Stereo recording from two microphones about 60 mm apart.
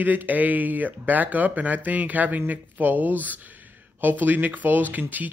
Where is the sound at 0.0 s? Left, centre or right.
Right.